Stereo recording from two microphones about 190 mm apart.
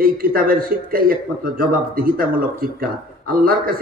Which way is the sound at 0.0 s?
50° right (ahead or behind).